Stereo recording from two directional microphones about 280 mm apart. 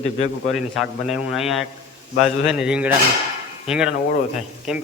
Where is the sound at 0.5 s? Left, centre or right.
Centre.